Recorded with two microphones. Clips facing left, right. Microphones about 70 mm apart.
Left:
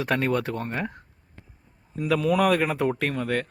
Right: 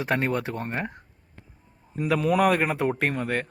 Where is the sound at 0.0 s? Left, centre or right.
Centre.